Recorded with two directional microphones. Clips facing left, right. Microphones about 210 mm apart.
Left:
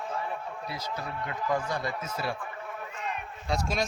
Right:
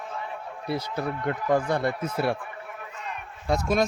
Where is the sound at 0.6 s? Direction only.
60° right (ahead or behind).